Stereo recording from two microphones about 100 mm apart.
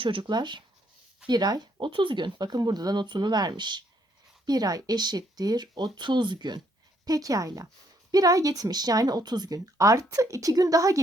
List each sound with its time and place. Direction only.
0.0 s speech: 55° right (ahead or behind)
7.0 s speech: 35° right (ahead or behind)